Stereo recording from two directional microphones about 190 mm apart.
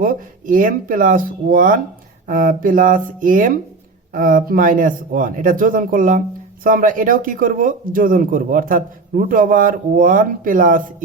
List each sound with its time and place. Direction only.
0.0 s speech: 45° right (ahead or behind)